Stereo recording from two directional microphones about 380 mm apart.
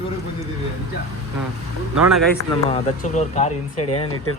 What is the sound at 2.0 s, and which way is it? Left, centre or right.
Speech, centre.